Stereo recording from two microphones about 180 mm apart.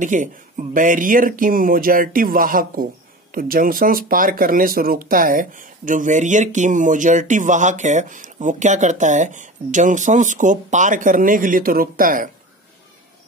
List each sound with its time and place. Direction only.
0.0 s speech: 45° right (ahead or behind)